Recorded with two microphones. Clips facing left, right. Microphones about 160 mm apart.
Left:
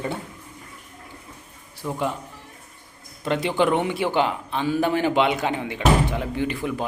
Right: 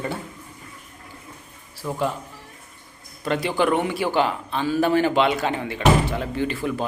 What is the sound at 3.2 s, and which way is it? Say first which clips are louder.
A man's voice: even; 20° left (ahead or behind).